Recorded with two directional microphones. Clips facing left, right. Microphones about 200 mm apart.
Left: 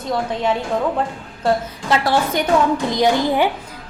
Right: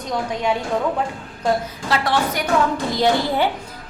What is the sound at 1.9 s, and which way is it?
Speech, 25° left (ahead or behind).